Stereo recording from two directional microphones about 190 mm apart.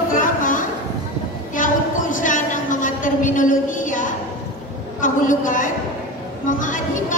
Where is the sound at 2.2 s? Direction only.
45° left (ahead or behind).